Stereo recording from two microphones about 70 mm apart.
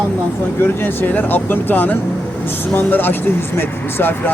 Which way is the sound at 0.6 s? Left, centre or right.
Left.